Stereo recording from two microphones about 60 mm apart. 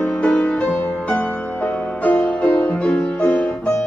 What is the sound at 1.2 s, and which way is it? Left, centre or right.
Music, left.